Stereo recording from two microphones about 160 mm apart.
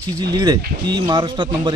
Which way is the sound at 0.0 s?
25° right (ahead or behind).